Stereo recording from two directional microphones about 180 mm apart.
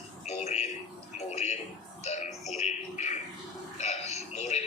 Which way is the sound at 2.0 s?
40° left (ahead or behind).